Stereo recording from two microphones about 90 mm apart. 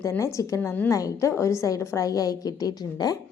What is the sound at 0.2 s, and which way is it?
A woman's voice, 35° left (ahead or behind).